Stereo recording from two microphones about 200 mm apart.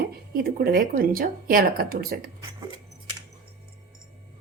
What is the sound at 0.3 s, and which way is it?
Speech, 50° right (ahead or behind).